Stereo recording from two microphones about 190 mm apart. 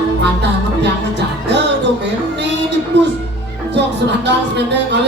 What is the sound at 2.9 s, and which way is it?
Music, 65° right (ahead or behind).